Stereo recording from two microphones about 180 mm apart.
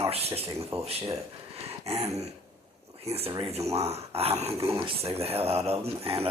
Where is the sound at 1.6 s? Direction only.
35° right (ahead or behind).